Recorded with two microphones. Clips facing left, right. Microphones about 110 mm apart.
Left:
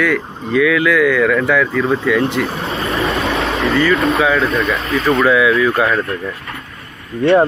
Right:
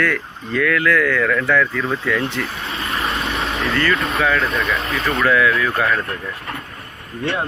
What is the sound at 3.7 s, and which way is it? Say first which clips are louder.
Speech: left 6 dB; 10° left (ahead or behind).